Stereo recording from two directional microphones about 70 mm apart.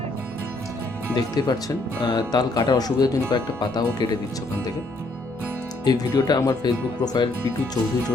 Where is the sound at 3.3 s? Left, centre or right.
Left.